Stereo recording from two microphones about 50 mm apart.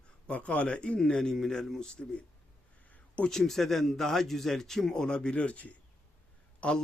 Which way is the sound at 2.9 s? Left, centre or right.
Left.